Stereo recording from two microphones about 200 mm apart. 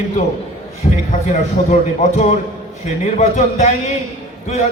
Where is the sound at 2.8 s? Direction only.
35° left (ahead or behind).